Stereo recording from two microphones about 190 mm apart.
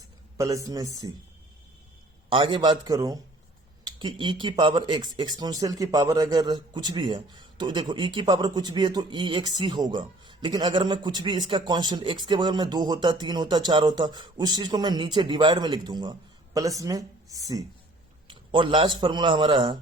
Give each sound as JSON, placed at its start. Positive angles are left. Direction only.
{"t": 0.3, "sound": "speech", "side_deg": -15}
{"t": 2.3, "sound": "speech", "side_deg": -25}